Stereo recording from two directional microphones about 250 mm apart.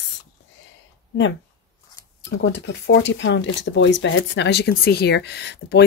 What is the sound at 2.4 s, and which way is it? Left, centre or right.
Speech, left.